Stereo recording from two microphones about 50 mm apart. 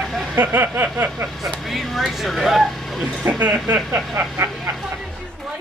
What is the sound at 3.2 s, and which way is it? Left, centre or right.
Speech, right.